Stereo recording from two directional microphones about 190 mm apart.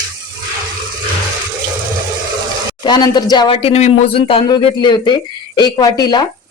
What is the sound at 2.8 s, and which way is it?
Speech, 20° left (ahead or behind).